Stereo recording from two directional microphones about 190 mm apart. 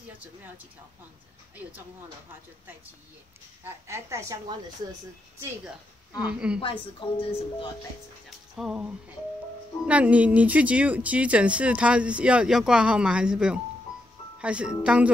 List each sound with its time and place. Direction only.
3.6 s speech: 15° right (ahead or behind)
6.1 s speech: 5° right (ahead or behind)
6.6 s speech: 25° left (ahead or behind)
8.3 s speech: centre (ahead or behind)